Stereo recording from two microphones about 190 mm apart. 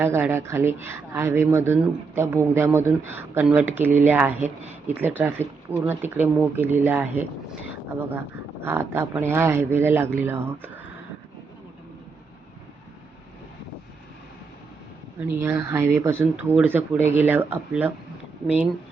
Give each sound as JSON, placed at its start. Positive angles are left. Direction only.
{"t": 0.0, "sound": "speech", "side_deg": -15}
{"t": 4.4, "sound": "speech", "side_deg": -35}
{"t": 4.9, "sound": "speech", "side_deg": -10}
{"t": 8.6, "sound": "speech", "side_deg": -10}
{"t": 15.2, "sound": "speech", "side_deg": -10}